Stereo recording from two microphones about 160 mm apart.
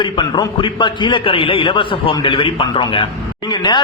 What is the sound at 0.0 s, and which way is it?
A man's voice, 30° left (ahead or behind).